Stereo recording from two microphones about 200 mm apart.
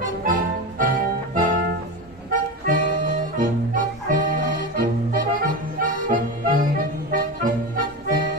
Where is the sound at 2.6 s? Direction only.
45° right (ahead or behind).